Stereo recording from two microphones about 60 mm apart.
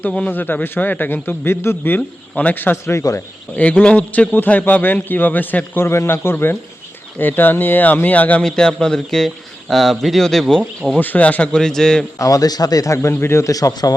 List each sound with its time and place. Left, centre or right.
0.3 s a man's voice: left
2.0 s a man's voice: left
2.9 s speech: left
3.5 s a man's voice: left
8.4 s speech: centre
11.0 s a man's voice: left
11.5 s a man's voice: centre
12.2 s speech: left
13.5 s speech: left